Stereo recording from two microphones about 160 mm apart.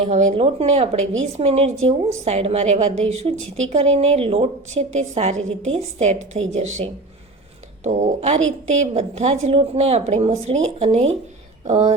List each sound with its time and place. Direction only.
0.0 s a woman's voice: 45° right (ahead or behind)
7.9 s a woman's voice: 50° right (ahead or behind)